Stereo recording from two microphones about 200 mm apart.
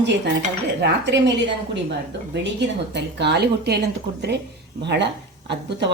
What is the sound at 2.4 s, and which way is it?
Speech, 60° right (ahead or behind).